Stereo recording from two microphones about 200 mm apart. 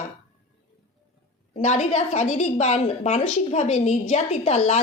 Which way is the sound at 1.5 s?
35° left (ahead or behind).